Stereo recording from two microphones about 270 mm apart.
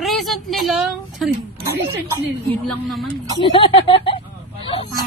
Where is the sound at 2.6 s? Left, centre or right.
Centre.